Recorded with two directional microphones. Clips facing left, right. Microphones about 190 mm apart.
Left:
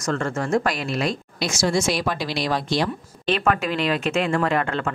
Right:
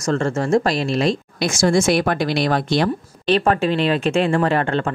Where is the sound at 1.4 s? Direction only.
50° right (ahead or behind).